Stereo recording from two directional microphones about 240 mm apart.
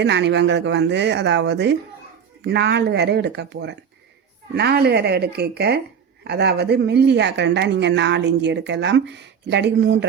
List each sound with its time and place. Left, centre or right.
0.0 s speech: right